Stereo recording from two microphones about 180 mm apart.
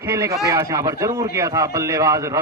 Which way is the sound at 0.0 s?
15° right (ahead or behind).